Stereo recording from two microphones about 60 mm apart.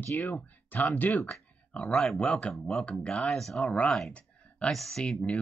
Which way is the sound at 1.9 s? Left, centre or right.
Centre.